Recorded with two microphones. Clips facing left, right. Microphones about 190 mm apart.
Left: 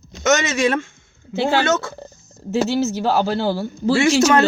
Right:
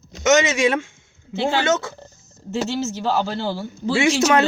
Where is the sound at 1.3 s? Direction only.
5° left (ahead or behind).